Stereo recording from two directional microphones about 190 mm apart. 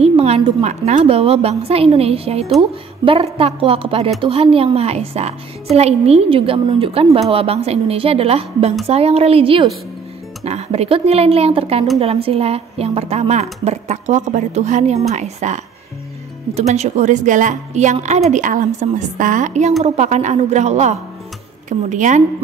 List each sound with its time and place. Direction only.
0.0 s a woman's voice: 35° right (ahead or behind)